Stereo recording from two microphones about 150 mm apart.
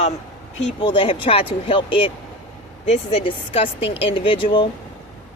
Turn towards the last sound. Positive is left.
turn(degrees=35)  # may be behind; listen again after turning